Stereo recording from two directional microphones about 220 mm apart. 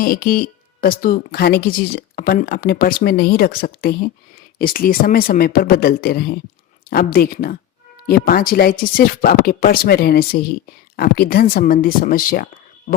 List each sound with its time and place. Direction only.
0.0 s speech: 40° left (ahead or behind)